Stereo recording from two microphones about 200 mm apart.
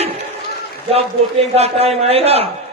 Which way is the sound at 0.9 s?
30° right (ahead or behind).